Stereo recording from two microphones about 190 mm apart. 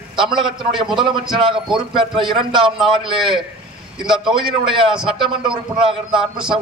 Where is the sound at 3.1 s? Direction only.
Centre (ahead or behind).